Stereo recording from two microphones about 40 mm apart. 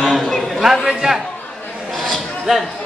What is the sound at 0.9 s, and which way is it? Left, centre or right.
Speech, centre.